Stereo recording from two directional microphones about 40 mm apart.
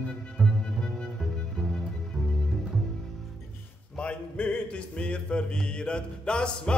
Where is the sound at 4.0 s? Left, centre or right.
Left.